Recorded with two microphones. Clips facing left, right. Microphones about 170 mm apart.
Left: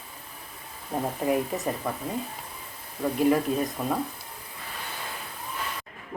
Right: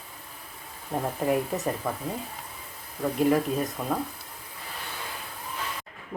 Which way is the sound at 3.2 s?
Centre (ahead or behind).